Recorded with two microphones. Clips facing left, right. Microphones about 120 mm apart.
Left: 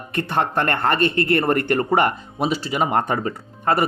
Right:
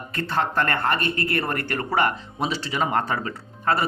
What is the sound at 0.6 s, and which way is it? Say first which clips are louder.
Speech: left 6 dB; 30° left (ahead or behind).